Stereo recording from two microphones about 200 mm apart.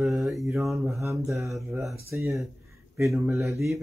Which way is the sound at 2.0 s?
15° right (ahead or behind).